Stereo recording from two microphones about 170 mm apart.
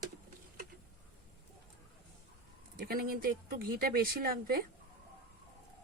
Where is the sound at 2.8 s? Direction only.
60° right (ahead or behind).